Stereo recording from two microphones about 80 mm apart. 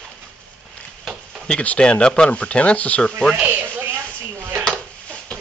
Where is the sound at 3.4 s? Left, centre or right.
Right.